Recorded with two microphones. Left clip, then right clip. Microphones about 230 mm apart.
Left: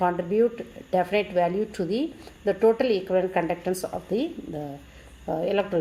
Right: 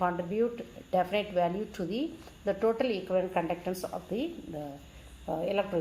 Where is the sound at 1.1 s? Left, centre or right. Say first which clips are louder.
Left 6 dB; left.